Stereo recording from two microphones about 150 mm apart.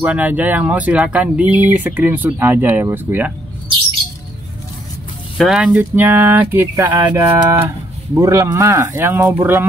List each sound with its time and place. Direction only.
0.0 s speech: 10° right (ahead or behind)
5.4 s speech: 5° right (ahead or behind)